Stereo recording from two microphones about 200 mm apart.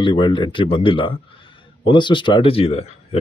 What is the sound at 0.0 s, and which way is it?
Speech, 25° left (ahead or behind).